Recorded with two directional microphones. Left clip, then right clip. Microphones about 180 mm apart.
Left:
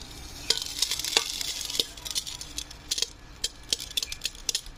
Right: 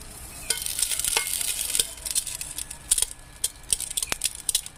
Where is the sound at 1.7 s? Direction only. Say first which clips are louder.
Left 1 dB; centre (ahead or behind).